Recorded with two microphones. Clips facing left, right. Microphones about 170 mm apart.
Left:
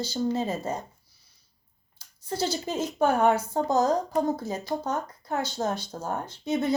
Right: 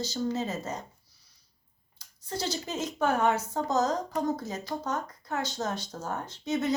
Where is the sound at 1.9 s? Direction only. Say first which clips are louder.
Left 5 dB; 30° left (ahead or behind).